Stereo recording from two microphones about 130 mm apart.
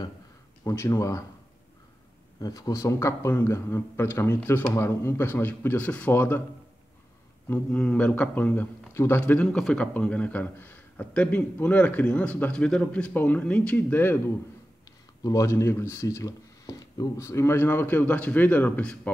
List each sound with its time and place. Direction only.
0.7 s a man's voice: 25° left (ahead or behind)
2.4 s a man's voice: 30° left (ahead or behind)
7.4 s a man's voice: 10° left (ahead or behind)